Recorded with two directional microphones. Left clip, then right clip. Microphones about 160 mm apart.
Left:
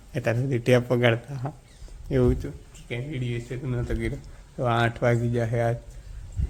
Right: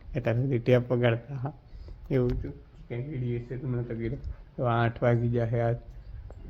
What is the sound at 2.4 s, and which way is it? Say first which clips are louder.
Speech: left 4 dB; 40° left (ahead or behind).